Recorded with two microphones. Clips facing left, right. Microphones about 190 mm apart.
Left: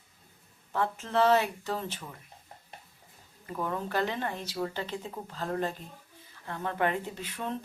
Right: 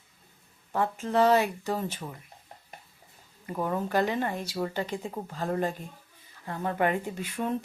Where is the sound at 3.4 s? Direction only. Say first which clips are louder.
Right 3 dB; 20° right (ahead or behind).